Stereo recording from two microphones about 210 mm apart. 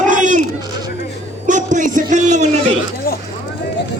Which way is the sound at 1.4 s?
35° right (ahead or behind).